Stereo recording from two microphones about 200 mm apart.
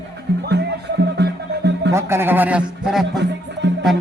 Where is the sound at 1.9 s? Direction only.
10° right (ahead or behind).